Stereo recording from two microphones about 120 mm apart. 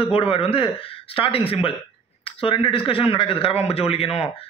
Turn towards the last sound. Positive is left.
turn(degrees=55)  # may be behind; listen again after turning